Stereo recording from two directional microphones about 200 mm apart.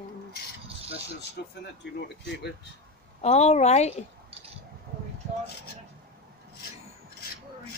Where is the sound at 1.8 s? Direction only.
60° left (ahead or behind).